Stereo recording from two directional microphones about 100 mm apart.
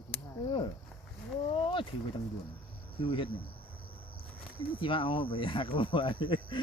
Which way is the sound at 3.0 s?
60° left (ahead or behind).